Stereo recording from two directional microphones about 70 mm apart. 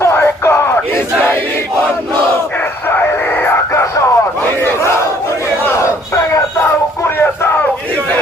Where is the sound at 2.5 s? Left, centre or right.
Left.